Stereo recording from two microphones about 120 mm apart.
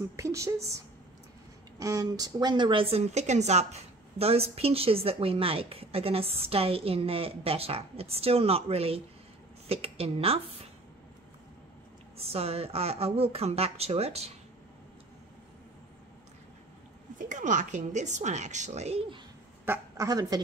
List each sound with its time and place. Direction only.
0.1 s speech: 25° right (ahead or behind)
1.8 s a woman's voice: 30° right (ahead or behind); by 10.7 s 55° right (ahead or behind)
12.3 s speech: 55° right (ahead or behind)
17.3 s a woman's voice: 90° right; by 19.0 s 65° right (ahead or behind)
19.6 s a sound: 20° right (ahead or behind)
20.1 s a woman's voice: 30° right (ahead or behind)